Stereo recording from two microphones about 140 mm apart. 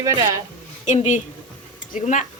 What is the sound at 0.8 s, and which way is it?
A woman's voice, 60° left (ahead or behind).